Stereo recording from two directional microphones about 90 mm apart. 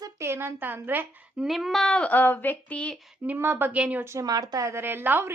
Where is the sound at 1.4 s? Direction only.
Centre (ahead or behind); by 3.0 s 15° left (ahead or behind).